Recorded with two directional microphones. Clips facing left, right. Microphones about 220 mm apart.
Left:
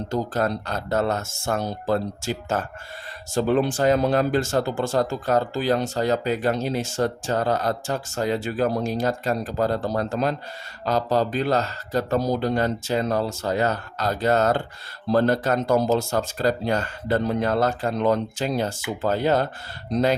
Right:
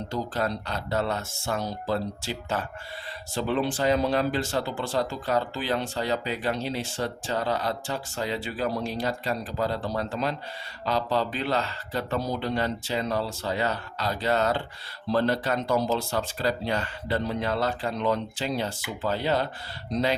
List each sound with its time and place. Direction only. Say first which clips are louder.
0.1 s speech: left 5 dB; 45° left (ahead or behind)